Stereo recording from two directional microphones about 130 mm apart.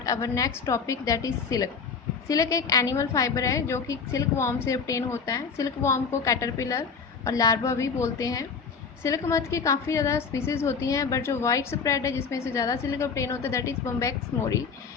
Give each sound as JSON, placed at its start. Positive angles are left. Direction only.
{"t": 0.0, "sound": "a woman's voice", "side_deg": 25}